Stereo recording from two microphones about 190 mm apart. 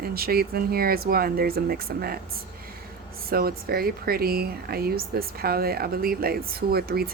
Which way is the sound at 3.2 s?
50° right (ahead or behind).